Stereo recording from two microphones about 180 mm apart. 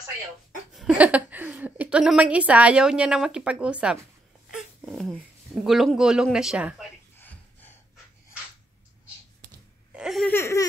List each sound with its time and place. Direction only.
0.7 s a woman's voice: 5° right (ahead or behind)
4.6 s wail: centre (ahead or behind)
5.6 s speech: centre (ahead or behind)
7.2 s a sound: 10° left (ahead or behind)
9.9 s laughter: centre (ahead or behind)
10.3 s laughter: 15° left (ahead or behind)